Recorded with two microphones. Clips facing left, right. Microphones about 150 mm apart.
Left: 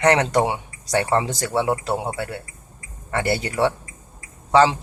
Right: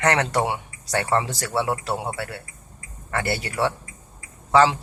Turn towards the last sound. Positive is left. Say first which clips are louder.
# left 1 dB
turn(degrees=20)  # may be behind; listen again after turning